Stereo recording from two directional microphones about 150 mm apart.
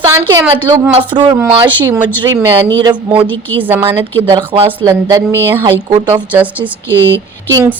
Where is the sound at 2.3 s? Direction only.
30° right (ahead or behind).